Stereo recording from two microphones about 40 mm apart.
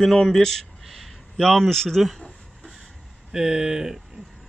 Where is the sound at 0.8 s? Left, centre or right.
Centre.